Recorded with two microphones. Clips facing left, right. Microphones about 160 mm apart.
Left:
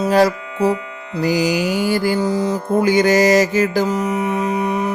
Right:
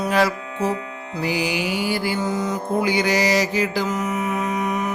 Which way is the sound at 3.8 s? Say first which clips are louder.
Left 4 dB; 30° left (ahead or behind).